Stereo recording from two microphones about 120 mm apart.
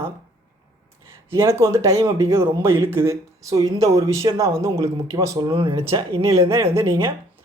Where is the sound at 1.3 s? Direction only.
25° right (ahead or behind).